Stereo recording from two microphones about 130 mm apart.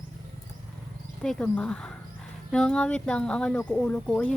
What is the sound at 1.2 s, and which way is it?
Speech, 5° left (ahead or behind).